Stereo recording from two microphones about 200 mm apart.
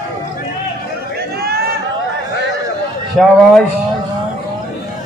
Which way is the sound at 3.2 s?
Centre (ahead or behind).